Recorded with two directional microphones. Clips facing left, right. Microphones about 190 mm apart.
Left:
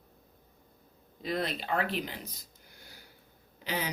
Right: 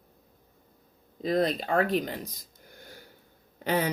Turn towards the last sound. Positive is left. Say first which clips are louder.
# right 8 dB
turn(degrees=-55)  # may be behind; listen again after turning